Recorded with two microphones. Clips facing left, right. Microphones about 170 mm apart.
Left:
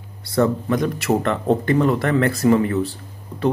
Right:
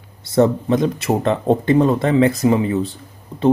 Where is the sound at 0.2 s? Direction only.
20° right (ahead or behind).